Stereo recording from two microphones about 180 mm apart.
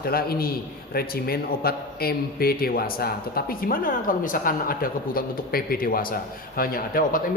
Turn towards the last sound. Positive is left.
turn(degrees=50)  # may be behind; listen again after turning